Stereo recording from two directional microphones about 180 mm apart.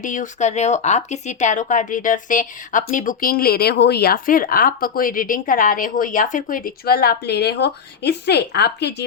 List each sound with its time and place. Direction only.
0.0 s speech: 45° left (ahead or behind); by 9.0 s 70° left (ahead or behind)